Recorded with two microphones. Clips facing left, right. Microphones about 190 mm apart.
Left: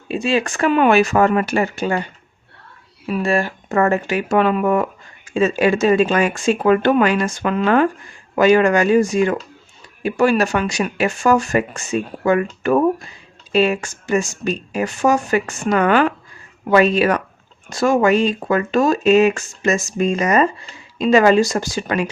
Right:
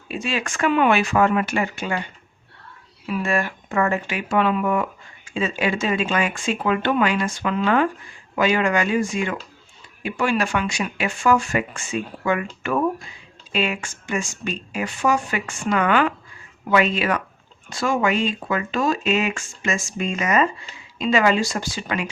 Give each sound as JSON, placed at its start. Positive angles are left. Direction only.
{"t": 0.1, "sound": "speech", "side_deg": 30}
{"t": 3.1, "sound": "speech", "side_deg": 35}
{"t": 3.8, "sound": "speech", "side_deg": 45}